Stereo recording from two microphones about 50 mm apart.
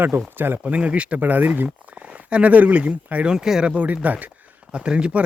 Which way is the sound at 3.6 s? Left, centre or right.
Right.